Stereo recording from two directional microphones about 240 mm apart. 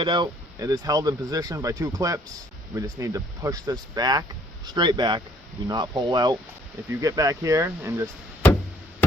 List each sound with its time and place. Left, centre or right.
0.0 s speech: centre